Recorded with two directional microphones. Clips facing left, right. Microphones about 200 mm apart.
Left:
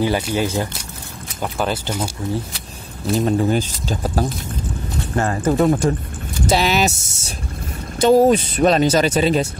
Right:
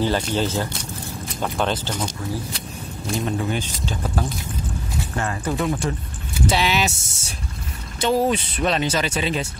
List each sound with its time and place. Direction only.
0.0 s speech: 10° left (ahead or behind)
3.2 s speech: 40° left (ahead or behind)